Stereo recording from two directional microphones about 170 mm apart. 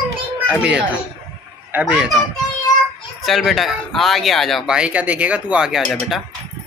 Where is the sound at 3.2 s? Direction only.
Centre (ahead or behind).